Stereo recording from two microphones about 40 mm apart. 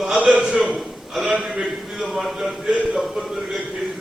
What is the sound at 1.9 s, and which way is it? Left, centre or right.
Speech, centre.